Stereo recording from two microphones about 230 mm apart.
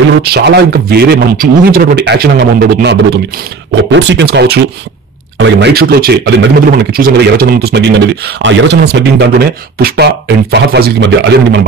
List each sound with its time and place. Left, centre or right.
0.3 s a man's voice: right